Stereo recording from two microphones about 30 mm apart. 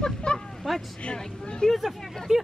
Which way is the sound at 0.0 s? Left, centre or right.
Left.